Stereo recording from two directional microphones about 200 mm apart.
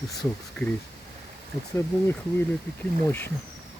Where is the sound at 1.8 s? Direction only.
10° left (ahead or behind).